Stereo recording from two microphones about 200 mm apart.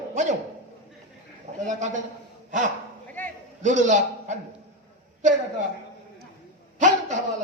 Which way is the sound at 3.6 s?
35° right (ahead or behind).